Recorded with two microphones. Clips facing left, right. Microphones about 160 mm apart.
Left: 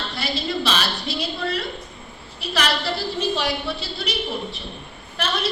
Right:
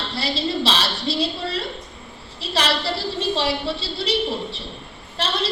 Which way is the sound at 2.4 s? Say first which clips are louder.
Right 1 dB; 30° right (ahead or behind).